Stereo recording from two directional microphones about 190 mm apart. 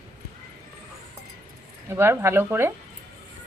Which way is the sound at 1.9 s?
10° right (ahead or behind).